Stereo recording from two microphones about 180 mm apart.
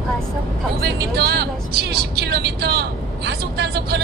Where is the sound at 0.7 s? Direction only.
65° right (ahead or behind).